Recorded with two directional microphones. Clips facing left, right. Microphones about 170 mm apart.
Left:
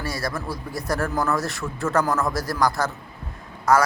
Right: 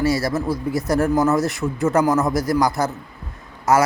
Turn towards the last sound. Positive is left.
turn(degrees=-25)  # may be behind; listen again after turning